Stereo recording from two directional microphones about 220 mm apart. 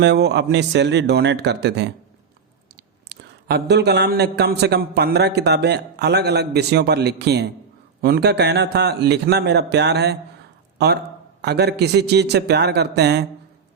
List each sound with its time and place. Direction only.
0.0 s a man's voice: 50° right (ahead or behind)
3.1 s a man's voice: 50° right (ahead or behind)